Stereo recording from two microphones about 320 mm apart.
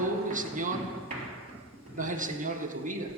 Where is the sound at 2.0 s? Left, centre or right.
Right.